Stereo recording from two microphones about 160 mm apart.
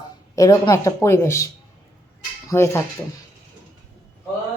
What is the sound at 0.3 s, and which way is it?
Speech, 20° left (ahead or behind).